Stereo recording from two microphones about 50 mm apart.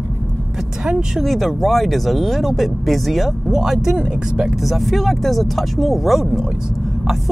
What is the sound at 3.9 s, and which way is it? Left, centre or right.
Speech, centre.